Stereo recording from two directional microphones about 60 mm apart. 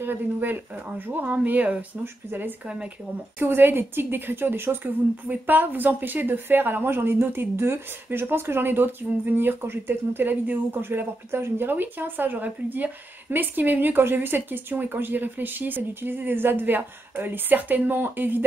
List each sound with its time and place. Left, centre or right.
0.0 s a woman's voice: right
3.3 s a woman's voice: right